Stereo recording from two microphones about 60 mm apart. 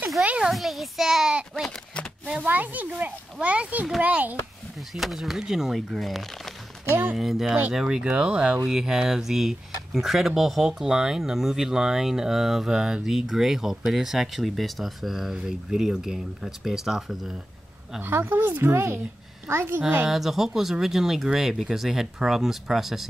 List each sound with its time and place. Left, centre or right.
0.4 s a child's voice: centre
2.4 s a child's voice: right
4.7 s speech: centre
18.0 s speech: right
20.1 s speech: centre